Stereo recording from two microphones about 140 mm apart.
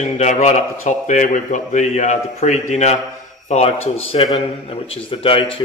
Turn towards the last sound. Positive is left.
turn(degrees=40)  # may be behind; listen again after turning